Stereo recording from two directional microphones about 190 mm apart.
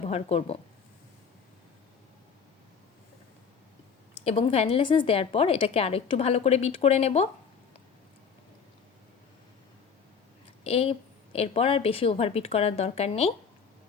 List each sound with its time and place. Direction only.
0.0 s a woman's voice: 30° left (ahead or behind)
4.2 s a woman's voice: 30° left (ahead or behind)
10.6 s a woman's voice: 30° left (ahead or behind)